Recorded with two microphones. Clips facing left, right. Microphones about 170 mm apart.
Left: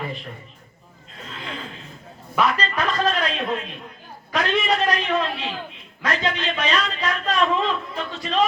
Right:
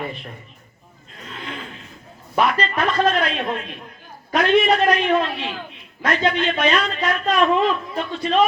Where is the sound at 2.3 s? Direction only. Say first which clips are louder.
Right 2 dB; 40° right (ahead or behind).